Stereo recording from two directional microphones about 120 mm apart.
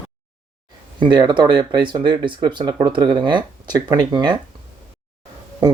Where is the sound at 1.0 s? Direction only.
40° right (ahead or behind).